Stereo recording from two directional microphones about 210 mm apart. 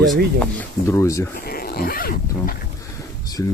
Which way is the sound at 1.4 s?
45° left (ahead or behind).